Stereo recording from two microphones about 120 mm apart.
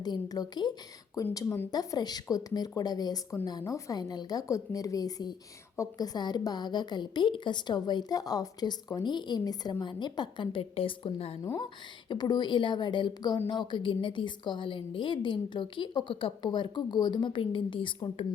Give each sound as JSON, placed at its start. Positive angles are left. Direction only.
{"t": 0.0, "sound": "a woman's voice", "side_deg": 35}
{"t": 11.6, "sound": "a woman's voice", "side_deg": 40}